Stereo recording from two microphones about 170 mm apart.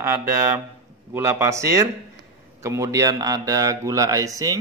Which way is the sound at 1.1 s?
15° right (ahead or behind).